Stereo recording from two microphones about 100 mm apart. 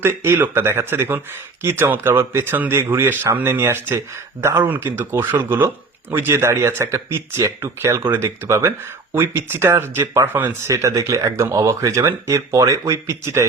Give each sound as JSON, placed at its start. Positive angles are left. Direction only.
{"t": 0.0, "sound": "speech", "side_deg": -20}